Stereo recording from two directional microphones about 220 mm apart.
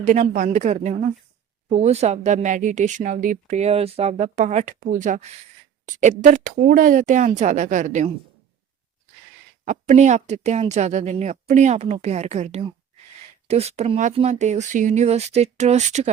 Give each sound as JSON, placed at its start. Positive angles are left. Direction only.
{"t": 0.0, "sound": "speech", "side_deg": -35}
{"t": 9.6, "sound": "speech", "side_deg": -35}